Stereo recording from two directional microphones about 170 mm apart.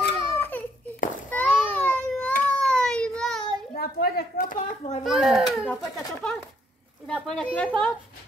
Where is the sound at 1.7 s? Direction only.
10° left (ahead or behind).